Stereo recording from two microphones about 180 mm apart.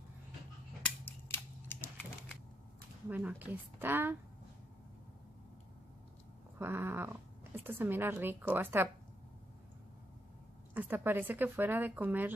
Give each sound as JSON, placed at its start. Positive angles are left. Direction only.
{"t": 0.8, "sound": "scissors", "side_deg": 10}
{"t": 3.1, "sound": "speech", "side_deg": -10}
{"t": 6.6, "sound": "speech", "side_deg": -10}
{"t": 10.7, "sound": "speech", "side_deg": -10}